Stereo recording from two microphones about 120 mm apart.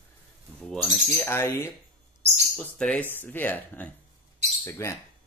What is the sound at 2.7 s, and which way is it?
Speech, 5° left (ahead or behind).